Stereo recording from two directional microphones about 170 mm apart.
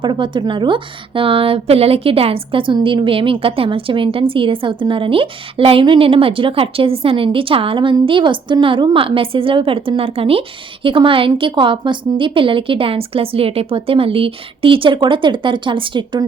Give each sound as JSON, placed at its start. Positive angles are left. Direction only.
{"t": 0.0, "sound": "a woman's voice", "side_deg": -30}